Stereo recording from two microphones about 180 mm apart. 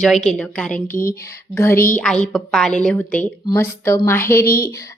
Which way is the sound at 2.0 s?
5° left (ahead or behind).